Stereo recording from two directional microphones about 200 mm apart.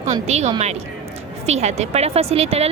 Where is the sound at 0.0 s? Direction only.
35° right (ahead or behind).